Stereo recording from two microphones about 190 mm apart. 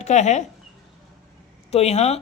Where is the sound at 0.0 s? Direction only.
40° left (ahead or behind).